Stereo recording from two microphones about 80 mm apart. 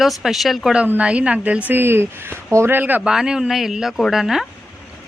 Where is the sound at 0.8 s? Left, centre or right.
Centre.